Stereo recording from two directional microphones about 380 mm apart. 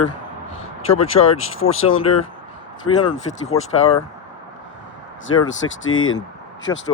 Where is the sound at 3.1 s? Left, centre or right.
Centre.